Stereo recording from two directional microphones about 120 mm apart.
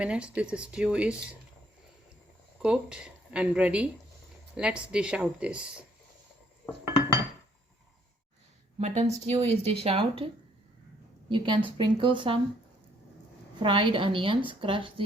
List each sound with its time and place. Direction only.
0.0 s speech: 10° right (ahead or behind)
2.6 s speech: 10° right (ahead or behind)
8.8 s speech: 65° right (ahead or behind); by 10.2 s 50° right (ahead or behind)
11.3 s a woman's voice: 45° right (ahead or behind)
13.6 s a woman's voice: 45° right (ahead or behind)